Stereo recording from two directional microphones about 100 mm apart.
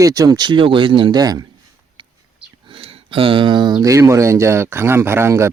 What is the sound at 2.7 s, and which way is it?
Speech, 65° right (ahead or behind).